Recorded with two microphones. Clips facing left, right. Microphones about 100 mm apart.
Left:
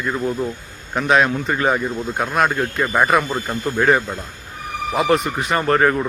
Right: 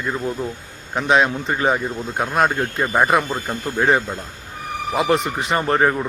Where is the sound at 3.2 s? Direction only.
Centre (ahead or behind).